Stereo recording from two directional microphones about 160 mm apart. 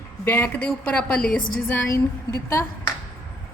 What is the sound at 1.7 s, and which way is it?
Speech, 20° left (ahead or behind).